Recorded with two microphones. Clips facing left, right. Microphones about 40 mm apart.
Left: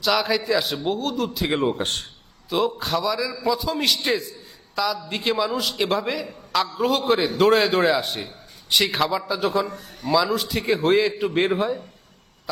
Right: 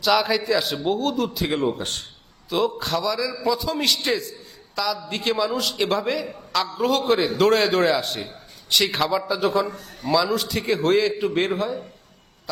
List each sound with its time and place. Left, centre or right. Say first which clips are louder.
0.0 s a man's voice: right 1 dB; centre
1.5 s a man's voice: left 1 dB; centre
1.8 s a man's voice: left 4 dB; left
2.5 s a man's voice: even; centre
11.5 s a man's voice: left 2 dB; centre